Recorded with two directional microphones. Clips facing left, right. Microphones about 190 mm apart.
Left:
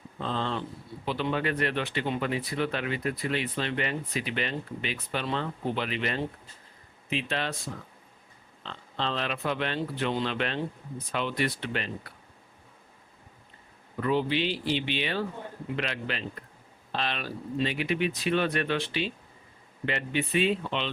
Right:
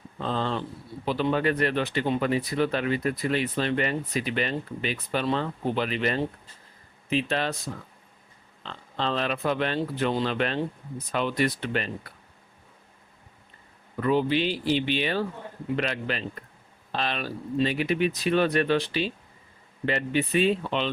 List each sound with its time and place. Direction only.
0.3 s speech: 40° right (ahead or behind)
9.0 s speech: 45° right (ahead or behind)
14.1 s speech: 45° right (ahead or behind)